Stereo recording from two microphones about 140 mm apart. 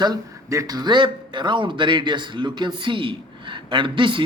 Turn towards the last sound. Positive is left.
turn(degrees=-35)  # may be behind; listen again after turning